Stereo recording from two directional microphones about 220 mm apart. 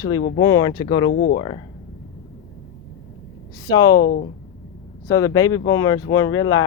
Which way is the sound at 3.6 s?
15° left (ahead or behind).